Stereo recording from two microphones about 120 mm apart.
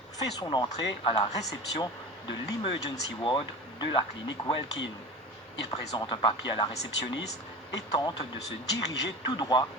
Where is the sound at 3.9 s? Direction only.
35° left (ahead or behind).